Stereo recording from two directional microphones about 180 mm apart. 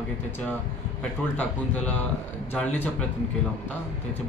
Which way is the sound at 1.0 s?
10° left (ahead or behind).